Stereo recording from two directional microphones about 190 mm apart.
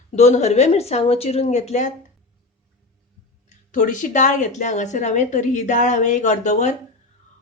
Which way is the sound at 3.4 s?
40° left (ahead or behind).